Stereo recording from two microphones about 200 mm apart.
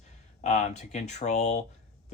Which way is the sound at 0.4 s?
35° left (ahead or behind).